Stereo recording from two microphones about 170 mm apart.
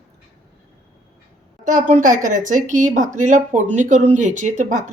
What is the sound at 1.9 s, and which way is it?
Speech, 50° right (ahead or behind).